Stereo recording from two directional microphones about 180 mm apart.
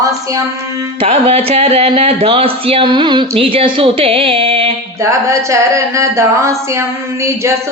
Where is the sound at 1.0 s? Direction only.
35° right (ahead or behind).